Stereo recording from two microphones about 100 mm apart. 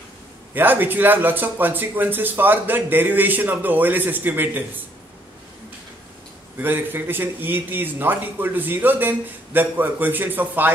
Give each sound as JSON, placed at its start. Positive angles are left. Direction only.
{"t": 0.6, "sound": "speech", "side_deg": -20}
{"t": 6.6, "sound": "speech", "side_deg": -20}